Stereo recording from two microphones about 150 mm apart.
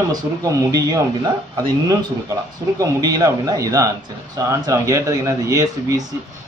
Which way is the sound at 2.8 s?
25° right (ahead or behind).